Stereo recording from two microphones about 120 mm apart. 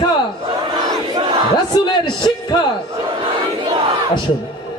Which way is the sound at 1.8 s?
40° left (ahead or behind).